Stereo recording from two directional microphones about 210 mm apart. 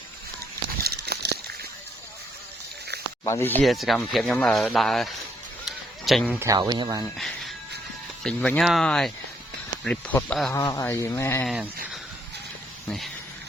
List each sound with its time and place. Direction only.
0.9 s crumpling: 50° right (ahead or behind)
3.2 s speech: 10° left (ahead or behind)
5.6 s a sound: centre (ahead or behind)
6.4 s speech: 15° right (ahead or behind)
7.0 s speech: centre (ahead or behind)
10.5 s speech: 15° left (ahead or behind)
11.4 s speech: 5° right (ahead or behind)